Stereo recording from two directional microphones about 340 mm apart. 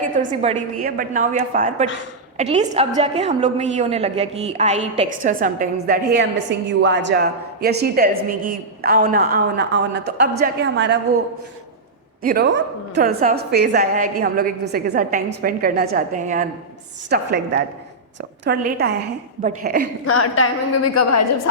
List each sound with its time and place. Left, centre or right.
0.0 s a woman's voice: right
12.2 s a woman's voice: right
20.1 s a woman's voice: left